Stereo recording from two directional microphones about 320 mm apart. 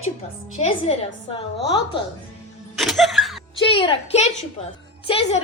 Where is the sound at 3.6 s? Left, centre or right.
Centre.